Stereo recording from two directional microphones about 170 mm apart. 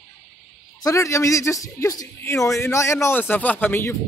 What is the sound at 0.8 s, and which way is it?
Speech, 20° left (ahead or behind).